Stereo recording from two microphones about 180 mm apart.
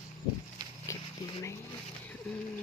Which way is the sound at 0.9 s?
15° left (ahead or behind).